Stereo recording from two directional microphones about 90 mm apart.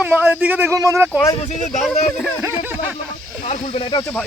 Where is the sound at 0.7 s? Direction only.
30° right (ahead or behind).